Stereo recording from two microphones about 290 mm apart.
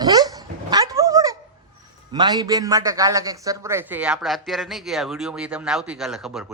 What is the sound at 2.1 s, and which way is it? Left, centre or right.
A man's voice, centre.